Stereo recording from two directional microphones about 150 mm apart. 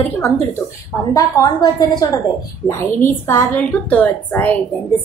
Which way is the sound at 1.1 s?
25° left (ahead or behind).